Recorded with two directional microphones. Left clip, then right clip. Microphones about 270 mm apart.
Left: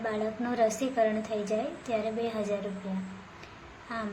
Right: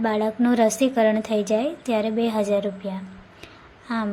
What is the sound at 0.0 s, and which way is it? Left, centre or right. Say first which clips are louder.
A woman's voice: right 9 dB; right.